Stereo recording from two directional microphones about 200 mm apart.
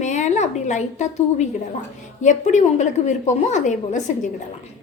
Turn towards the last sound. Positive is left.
turn(degrees=35)  # may be behind; listen again after turning